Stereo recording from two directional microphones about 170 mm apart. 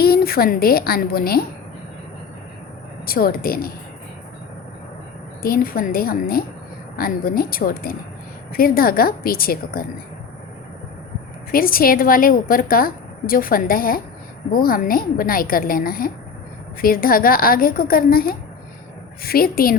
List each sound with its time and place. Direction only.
0.0 s a woman's voice: 65° left (ahead or behind)
3.1 s a woman's voice: 60° left (ahead or behind)
5.4 s a woman's voice: 60° left (ahead or behind)
11.5 s a woman's voice: 60° left (ahead or behind)